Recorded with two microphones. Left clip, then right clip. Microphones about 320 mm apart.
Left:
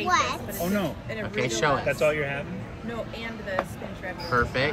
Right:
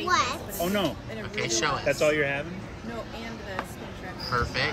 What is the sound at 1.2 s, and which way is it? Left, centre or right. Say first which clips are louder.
Speech: left 2 dB; centre.